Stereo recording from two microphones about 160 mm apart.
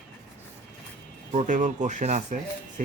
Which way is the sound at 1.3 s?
50° right (ahead or behind).